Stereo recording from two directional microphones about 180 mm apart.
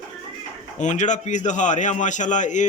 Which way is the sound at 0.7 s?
40° left (ahead or behind).